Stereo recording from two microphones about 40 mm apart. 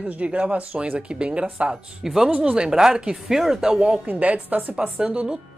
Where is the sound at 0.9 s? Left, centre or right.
Right.